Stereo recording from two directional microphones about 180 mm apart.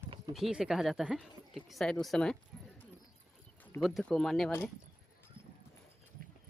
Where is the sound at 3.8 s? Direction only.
Centre (ahead or behind).